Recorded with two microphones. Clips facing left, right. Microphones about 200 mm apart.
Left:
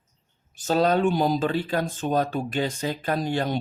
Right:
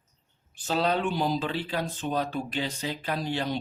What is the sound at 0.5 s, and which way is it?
Speech, 45° left (ahead or behind).